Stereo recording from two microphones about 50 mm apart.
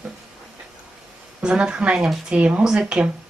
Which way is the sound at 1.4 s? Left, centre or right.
Centre.